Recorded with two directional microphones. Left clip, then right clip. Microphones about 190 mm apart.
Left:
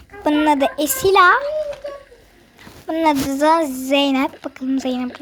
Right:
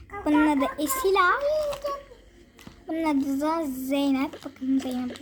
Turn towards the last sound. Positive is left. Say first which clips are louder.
# left 6 dB
turn(degrees=25)  # may be behind; listen again after turning